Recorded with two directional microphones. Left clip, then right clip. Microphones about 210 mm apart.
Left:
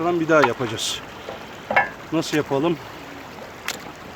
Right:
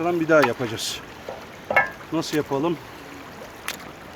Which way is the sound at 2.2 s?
5° left (ahead or behind).